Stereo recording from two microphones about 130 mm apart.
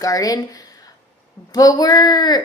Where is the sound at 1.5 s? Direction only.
30° left (ahead or behind).